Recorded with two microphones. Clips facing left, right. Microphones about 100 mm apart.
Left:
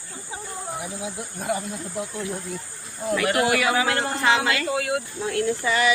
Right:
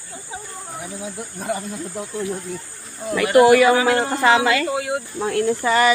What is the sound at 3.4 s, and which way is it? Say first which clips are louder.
Speech: right 10 dB; 45° right (ahead or behind).